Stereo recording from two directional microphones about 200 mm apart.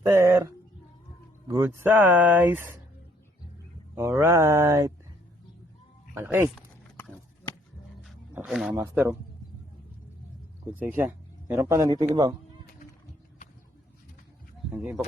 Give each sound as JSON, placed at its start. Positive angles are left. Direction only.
{"t": 0.1, "sound": "speech", "side_deg": -10}
{"t": 4.2, "sound": "speech", "side_deg": -15}
{"t": 6.1, "sound": "speech", "side_deg": -10}
{"t": 6.9, "sound": "horse", "side_deg": 10}
{"t": 8.0, "sound": "roaring cats", "side_deg": -5}
{"t": 8.7, "sound": "speech", "side_deg": -10}
{"t": 10.8, "sound": "speech", "side_deg": -10}
{"t": 14.8, "sound": "speech", "side_deg": -5}